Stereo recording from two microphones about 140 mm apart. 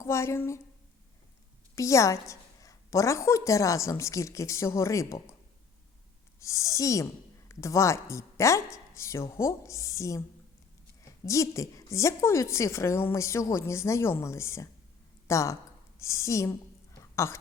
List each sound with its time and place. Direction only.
0.0 s a woman's voice: 20° left (ahead or behind)
1.7 s a woman's voice: 20° left (ahead or behind)
6.4 s a woman's voice: 20° left (ahead or behind)